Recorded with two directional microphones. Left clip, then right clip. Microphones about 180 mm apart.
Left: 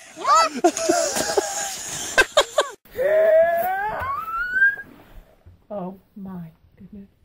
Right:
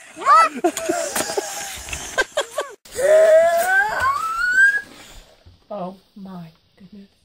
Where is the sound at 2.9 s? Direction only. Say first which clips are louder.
Right 4 dB; 40° right (ahead or behind).